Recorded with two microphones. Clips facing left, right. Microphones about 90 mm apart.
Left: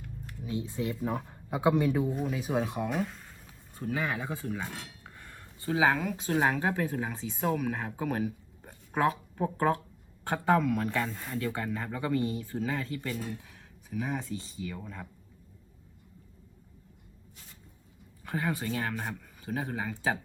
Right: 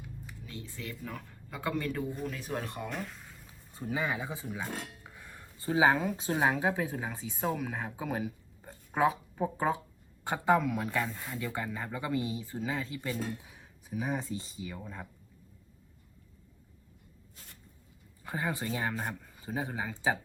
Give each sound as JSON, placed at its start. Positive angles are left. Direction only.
{"t": 0.4, "sound": "speech", "side_deg": 20}
{"t": 2.1, "sound": "speech", "side_deg": 5}
{"t": 3.8, "sound": "speech", "side_deg": -15}
{"t": 5.0, "sound": "a sound", "side_deg": -10}
{"t": 6.3, "sound": "speech", "side_deg": -10}
{"t": 10.8, "sound": "speech", "side_deg": 0}
{"t": 18.2, "sound": "speech", "side_deg": -15}